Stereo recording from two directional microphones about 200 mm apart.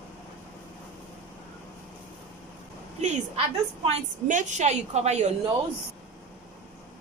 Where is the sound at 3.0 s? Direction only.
35° right (ahead or behind).